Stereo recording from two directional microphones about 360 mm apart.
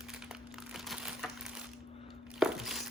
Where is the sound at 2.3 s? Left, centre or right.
Centre.